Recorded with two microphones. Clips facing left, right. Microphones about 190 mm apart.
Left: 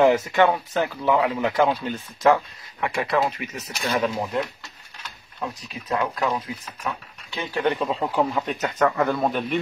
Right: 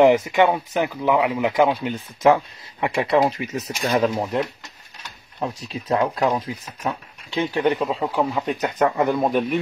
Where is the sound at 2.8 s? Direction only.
30° right (ahead or behind).